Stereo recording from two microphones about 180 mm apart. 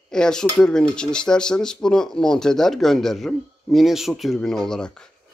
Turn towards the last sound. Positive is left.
turn(degrees=5)  # may be behind; listen again after turning